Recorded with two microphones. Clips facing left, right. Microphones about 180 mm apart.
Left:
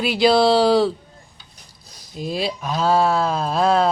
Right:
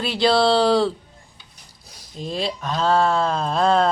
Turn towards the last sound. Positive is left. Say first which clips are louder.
# left 1 dB
turn(degrees=5)  # may be behind; listen again after turning